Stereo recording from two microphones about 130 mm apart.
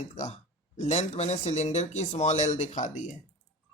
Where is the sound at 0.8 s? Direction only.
60° left (ahead or behind).